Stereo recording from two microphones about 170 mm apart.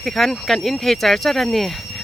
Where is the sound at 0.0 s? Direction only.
Centre (ahead or behind).